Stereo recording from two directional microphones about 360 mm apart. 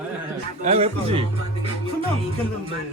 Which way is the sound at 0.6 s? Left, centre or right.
Centre.